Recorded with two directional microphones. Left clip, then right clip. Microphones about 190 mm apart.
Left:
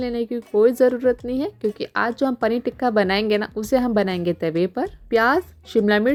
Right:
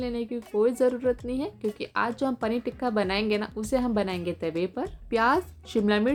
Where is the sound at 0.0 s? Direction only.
40° left (ahead or behind).